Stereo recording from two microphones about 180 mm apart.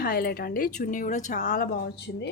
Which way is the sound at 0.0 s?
55° left (ahead or behind).